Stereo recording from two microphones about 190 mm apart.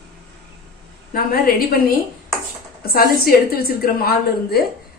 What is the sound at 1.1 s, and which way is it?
Speech, 50° left (ahead or behind).